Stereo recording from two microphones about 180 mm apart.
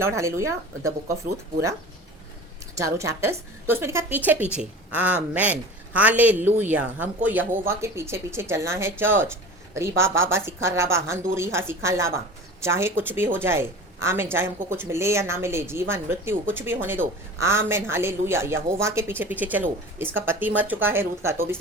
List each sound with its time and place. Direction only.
0.0 s speech: 15° right (ahead or behind)
2.7 s speech: 15° right (ahead or behind)